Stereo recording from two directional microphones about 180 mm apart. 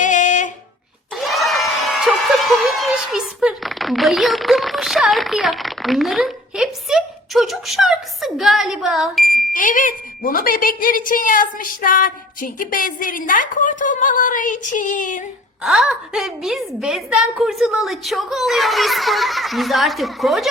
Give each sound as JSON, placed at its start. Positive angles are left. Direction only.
{"t": 0.0, "sound": "a sound", "side_deg": 45}
{"t": 1.1, "sound": "speech", "side_deg": 0}
{"t": 9.5, "sound": "a woman's voice", "side_deg": 50}
{"t": 15.6, "sound": "a woman's voice", "side_deg": 0}